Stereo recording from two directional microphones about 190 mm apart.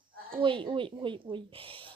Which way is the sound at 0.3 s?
25° right (ahead or behind).